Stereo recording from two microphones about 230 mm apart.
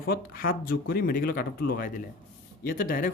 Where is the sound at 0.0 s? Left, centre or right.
Left.